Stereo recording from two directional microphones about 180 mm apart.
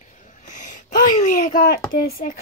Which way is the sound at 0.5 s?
45° left (ahead or behind).